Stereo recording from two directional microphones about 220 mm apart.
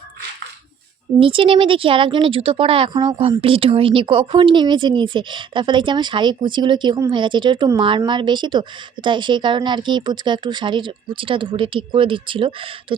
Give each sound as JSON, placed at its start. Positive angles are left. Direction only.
{"t": 1.2, "sound": "speech", "side_deg": -25}